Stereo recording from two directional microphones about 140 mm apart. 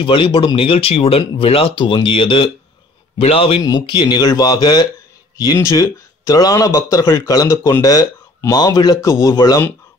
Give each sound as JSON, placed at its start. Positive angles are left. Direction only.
{"t": 0.0, "sound": "speech", "side_deg": 35}